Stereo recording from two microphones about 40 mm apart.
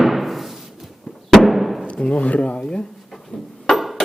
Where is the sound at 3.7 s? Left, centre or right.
Centre.